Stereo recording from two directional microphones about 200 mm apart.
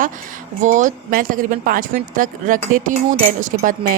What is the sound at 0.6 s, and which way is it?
Speech, 40° right (ahead or behind).